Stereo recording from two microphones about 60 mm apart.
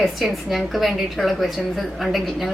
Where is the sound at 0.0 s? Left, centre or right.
Centre.